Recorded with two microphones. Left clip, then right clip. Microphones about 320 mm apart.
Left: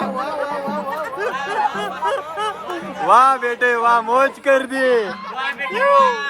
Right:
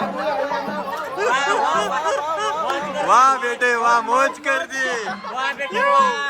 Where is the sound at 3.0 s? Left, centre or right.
Centre.